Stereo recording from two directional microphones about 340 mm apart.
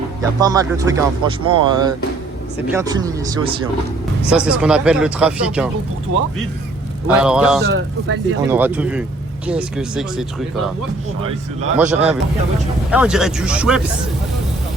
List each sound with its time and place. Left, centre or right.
0.3 s speech: centre
7.1 s speech: centre
7.6 s speech: right
8.4 s speech: centre
11.8 s speech: centre